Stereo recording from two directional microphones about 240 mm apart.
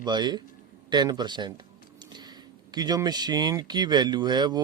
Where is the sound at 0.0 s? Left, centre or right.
Centre.